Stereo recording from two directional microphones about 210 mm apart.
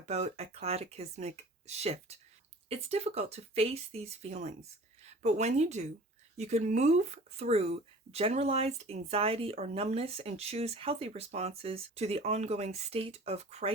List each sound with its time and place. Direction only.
0.0 s speech: 30° right (ahead or behind)